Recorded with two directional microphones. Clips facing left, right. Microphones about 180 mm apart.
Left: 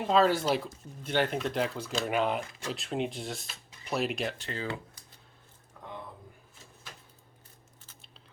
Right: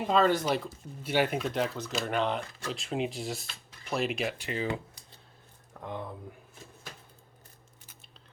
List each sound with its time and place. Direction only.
0.1 s speech: 5° left (ahead or behind)
1.0 s speech: 10° right (ahead or behind)
5.7 s a sound: 55° right (ahead or behind)